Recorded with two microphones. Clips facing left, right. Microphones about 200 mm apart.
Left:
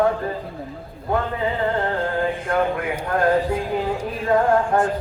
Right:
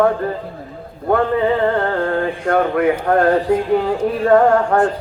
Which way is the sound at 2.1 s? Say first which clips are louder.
Right 5 dB; 65° right (ahead or behind).